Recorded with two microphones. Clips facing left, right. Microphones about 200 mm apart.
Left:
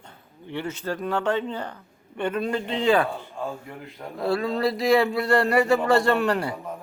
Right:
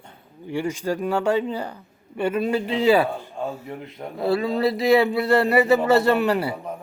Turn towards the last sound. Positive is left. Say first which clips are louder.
# right 2 dB
turn(degrees=-5)  # may be behind; listen again after turning